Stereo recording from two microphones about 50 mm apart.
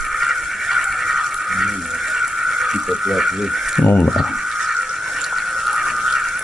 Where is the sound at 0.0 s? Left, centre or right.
Centre.